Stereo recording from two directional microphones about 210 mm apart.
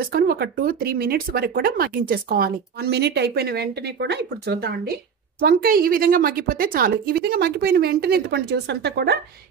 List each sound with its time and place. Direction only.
0.1 s speech: 50° right (ahead or behind)